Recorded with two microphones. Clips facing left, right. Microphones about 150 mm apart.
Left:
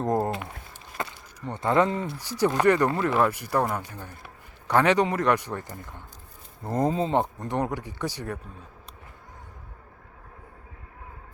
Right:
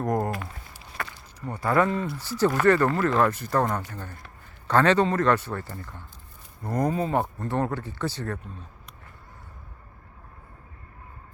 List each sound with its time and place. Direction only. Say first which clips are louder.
0.0 s speech: left 1 dB; 25° left (ahead or behind)
1.0 s a sound: left 2 dB; 20° left (ahead or behind)
1.5 s speech: even; 20° left (ahead or behind)